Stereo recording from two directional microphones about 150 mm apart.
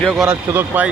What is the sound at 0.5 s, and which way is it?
Speech, 10° right (ahead or behind).